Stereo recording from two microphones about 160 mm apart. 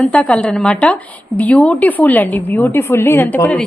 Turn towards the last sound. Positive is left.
turn(degrees=15)  # may be behind; listen again after turning